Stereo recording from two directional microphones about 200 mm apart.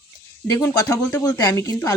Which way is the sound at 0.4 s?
15° left (ahead or behind).